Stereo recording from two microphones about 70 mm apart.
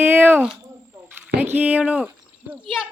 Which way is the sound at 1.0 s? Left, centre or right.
Right.